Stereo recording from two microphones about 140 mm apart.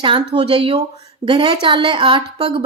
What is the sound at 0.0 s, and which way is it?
A woman's voice, 35° right (ahead or behind).